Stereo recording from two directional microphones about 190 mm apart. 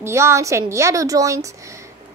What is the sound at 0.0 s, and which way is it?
A woman's voice, 15° right (ahead or behind).